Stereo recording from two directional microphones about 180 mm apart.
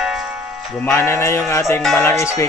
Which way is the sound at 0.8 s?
15° left (ahead or behind).